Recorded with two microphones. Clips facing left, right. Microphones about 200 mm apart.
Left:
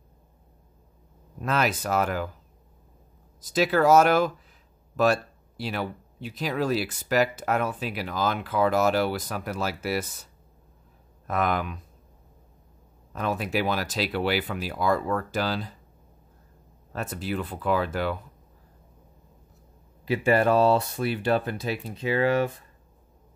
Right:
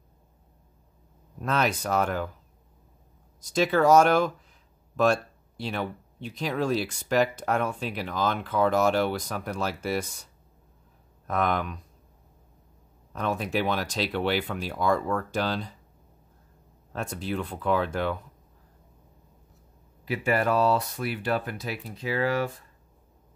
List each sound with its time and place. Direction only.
1.4 s speech: 5° left (ahead or behind)
3.3 s speech: 5° left (ahead or behind)
11.2 s speech: 5° left (ahead or behind)
13.1 s speech: 5° left (ahead or behind)
16.9 s speech: 5° left (ahead or behind)
20.1 s speech: 30° left (ahead or behind)